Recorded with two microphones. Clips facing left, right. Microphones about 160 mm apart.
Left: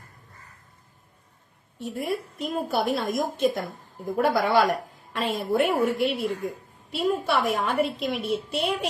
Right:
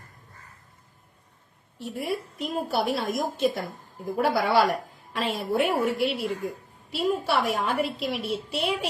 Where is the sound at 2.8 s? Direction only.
50° left (ahead or behind).